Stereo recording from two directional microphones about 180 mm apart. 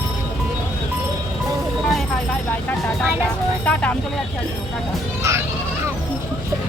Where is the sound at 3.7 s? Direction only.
5° left (ahead or behind).